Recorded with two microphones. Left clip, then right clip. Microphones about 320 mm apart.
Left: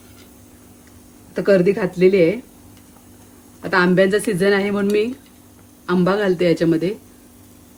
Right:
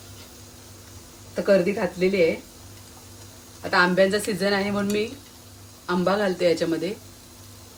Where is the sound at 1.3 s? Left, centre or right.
Left.